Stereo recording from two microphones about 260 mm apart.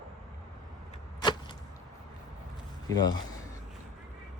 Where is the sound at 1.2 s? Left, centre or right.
Centre.